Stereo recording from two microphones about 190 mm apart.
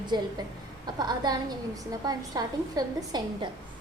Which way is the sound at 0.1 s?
20° right (ahead or behind).